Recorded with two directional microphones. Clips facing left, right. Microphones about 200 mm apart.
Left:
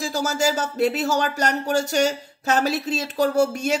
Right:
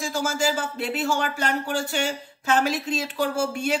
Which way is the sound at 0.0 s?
40° left (ahead or behind).